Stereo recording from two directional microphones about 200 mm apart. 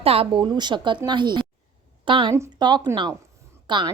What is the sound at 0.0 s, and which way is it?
A woman's voice, 30° right (ahead or behind).